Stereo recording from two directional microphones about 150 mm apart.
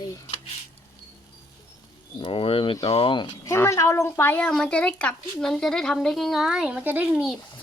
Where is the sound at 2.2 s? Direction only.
35° left (ahead or behind).